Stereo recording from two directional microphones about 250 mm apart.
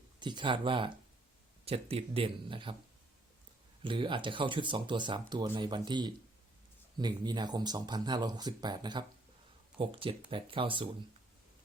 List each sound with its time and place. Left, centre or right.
0.2 s speech: centre
3.8 s speech: centre